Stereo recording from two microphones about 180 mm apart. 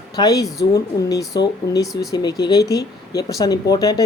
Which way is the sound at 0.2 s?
20° left (ahead or behind).